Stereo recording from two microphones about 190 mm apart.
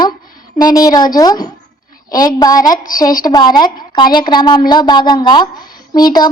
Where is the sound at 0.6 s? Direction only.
20° left (ahead or behind).